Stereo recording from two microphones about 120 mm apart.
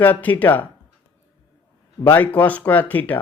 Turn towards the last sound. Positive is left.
turn(degrees=15)  # may be behind; listen again after turning